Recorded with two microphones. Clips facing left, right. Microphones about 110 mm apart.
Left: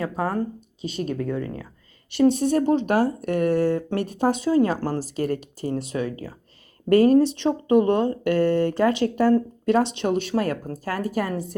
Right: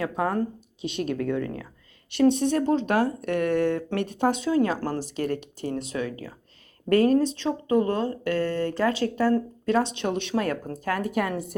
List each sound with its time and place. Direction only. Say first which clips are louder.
0.0 s speech: even; centre (ahead or behind)